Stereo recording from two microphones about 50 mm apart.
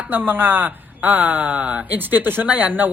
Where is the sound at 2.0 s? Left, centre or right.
Right.